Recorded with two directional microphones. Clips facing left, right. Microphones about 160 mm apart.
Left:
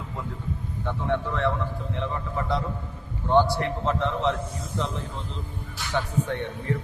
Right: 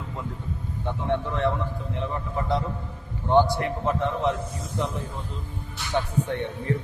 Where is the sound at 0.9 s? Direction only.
20° right (ahead or behind).